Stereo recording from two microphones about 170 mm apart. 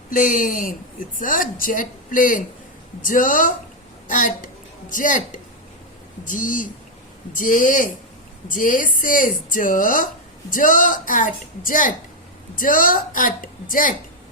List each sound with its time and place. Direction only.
0.1 s speech: 50° left (ahead or behind)